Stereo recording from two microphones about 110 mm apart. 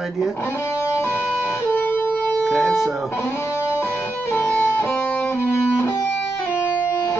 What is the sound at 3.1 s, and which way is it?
Music, 25° left (ahead or behind).